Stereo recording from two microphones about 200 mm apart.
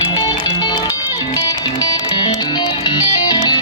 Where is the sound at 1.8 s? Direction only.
20° left (ahead or behind).